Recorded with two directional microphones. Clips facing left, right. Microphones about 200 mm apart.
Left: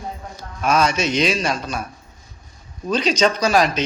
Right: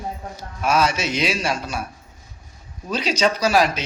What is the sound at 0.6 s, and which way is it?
Speech, 5° right (ahead or behind).